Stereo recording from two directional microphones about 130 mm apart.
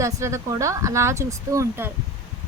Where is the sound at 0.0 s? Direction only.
25° right (ahead or behind).